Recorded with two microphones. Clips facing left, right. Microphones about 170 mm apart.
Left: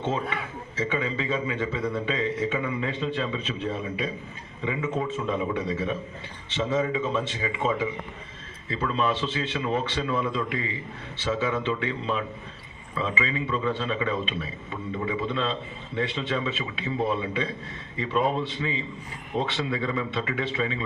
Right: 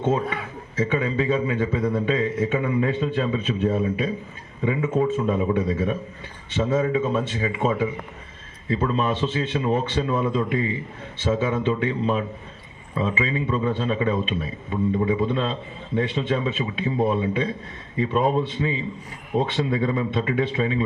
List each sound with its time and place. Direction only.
0.9 s a man's voice: 45° right (ahead or behind)